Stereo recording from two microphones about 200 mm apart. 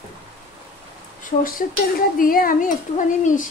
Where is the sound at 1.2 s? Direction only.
40° left (ahead or behind).